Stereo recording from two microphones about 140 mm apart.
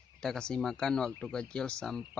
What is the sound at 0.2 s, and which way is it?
Speech, 5° left (ahead or behind).